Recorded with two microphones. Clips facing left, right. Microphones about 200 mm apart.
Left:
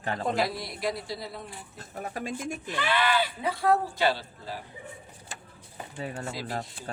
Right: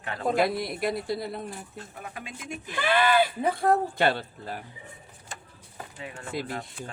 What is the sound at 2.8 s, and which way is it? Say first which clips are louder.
Speech: right 4 dB; 50° right (ahead or behind).